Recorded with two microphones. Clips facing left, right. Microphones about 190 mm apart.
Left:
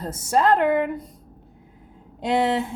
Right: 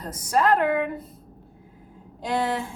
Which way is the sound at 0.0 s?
25° left (ahead or behind).